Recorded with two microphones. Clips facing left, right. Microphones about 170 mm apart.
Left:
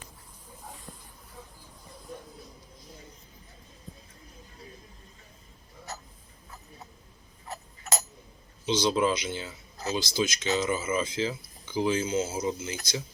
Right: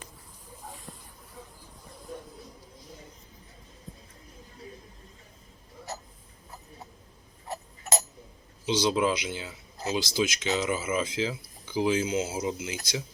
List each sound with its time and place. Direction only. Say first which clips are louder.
0.7 s snake: even; centre (ahead or behind)
7.4 s tick-tock: right 2 dB; 20° right (ahead or behind)
8.6 s speech: even; 5° right (ahead or behind)